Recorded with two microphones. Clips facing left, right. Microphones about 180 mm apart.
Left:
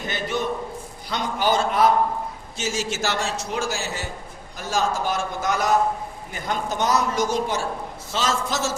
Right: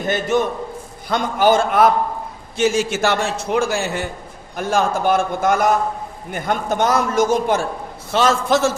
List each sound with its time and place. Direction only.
0.0 s a man's voice: 50° right (ahead or behind)